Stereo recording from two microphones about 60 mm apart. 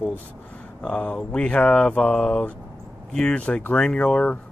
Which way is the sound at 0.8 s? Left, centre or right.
Left.